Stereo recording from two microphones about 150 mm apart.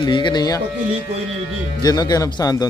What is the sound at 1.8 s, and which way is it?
Speech, 25° left (ahead or behind).